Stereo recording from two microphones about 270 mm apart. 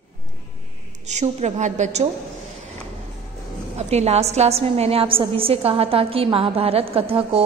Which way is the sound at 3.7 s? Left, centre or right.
Right.